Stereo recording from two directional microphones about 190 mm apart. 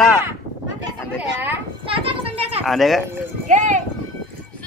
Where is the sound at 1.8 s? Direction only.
30° right (ahead or behind).